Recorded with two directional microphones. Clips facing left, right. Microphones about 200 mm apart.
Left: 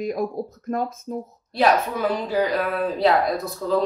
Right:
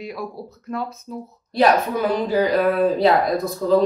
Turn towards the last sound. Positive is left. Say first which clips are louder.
# right 4 dB
turn(degrees=0)  # may be behind; listen again after turning